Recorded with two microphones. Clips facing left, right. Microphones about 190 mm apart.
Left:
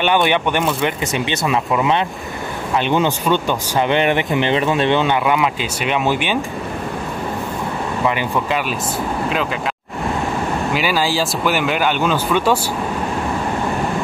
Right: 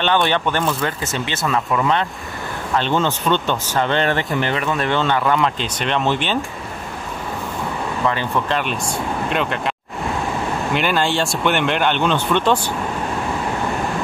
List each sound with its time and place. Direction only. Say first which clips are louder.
0.0 s speech: left 2 dB; 15° left (ahead or behind)
8.0 s speech: left 1 dB; 10° left (ahead or behind)
10.7 s speech: right 1 dB; 5° left (ahead or behind)